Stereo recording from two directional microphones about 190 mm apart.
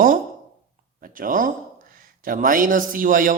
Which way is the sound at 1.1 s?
45° right (ahead or behind).